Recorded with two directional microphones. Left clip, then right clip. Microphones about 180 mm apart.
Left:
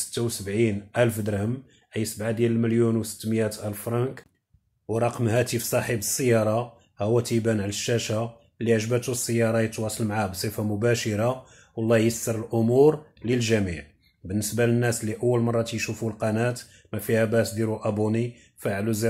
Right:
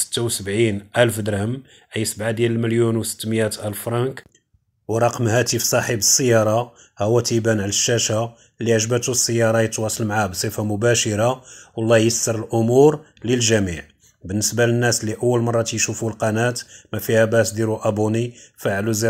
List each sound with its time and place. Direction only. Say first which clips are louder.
0.1 s speech: right 5 dB; 25° right (ahead or behind)